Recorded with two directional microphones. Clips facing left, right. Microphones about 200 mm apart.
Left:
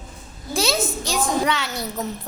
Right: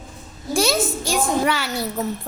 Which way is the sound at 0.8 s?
5° right (ahead or behind).